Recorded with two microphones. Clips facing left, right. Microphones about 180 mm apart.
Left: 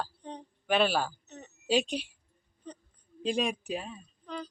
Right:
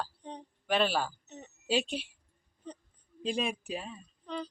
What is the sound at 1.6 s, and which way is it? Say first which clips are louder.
Speech: left 3 dB; 5° right (ahead or behind).